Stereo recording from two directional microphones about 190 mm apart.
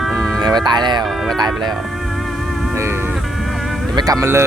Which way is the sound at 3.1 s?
Centre (ahead or behind).